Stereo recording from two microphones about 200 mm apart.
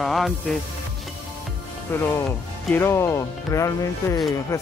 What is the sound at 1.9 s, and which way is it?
Speech, 10° left (ahead or behind).